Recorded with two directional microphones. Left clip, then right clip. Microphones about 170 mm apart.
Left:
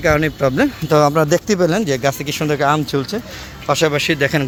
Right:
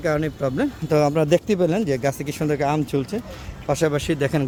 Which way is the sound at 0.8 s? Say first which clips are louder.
Left 4 dB; 10° right (ahead or behind).